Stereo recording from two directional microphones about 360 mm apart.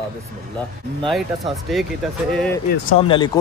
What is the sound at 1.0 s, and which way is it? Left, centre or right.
Speech, centre.